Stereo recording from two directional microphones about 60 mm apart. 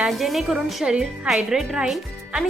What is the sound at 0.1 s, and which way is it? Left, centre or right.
Speech, centre.